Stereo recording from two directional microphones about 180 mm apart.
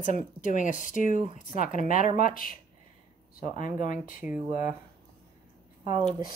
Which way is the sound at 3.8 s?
45° left (ahead or behind).